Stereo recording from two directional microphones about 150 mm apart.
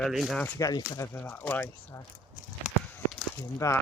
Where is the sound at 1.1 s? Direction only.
10° left (ahead or behind).